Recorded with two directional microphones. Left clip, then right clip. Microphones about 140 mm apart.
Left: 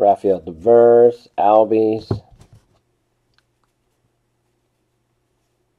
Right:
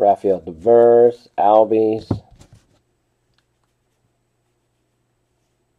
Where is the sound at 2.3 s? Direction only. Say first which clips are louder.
Right 2 dB; 25° right (ahead or behind).